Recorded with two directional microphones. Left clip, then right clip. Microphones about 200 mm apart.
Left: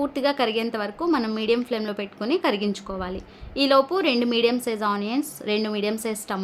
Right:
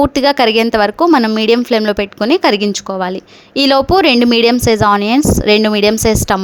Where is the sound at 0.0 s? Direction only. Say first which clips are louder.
Right 12 dB; 50° right (ahead or behind).